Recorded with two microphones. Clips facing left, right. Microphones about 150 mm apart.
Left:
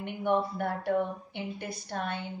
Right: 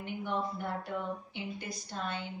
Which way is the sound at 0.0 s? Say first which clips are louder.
Left 6 dB; 65° left (ahead or behind).